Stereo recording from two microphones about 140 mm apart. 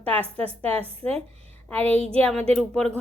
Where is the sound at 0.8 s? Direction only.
45° right (ahead or behind).